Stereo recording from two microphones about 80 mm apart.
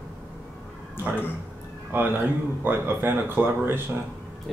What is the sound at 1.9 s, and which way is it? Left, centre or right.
Speech, right.